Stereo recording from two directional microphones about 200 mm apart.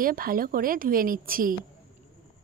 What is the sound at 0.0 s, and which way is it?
A woman's voice, 45° right (ahead or behind).